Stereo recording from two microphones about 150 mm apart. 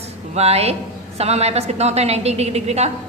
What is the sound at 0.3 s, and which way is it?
A woman's voice, 45° right (ahead or behind).